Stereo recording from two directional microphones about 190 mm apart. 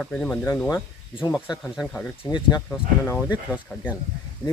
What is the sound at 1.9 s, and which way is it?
Speech, 5° left (ahead or behind).